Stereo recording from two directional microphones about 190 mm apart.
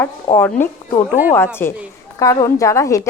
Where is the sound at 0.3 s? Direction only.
20° left (ahead or behind).